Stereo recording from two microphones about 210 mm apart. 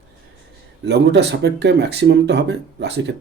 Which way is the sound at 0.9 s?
55° right (ahead or behind).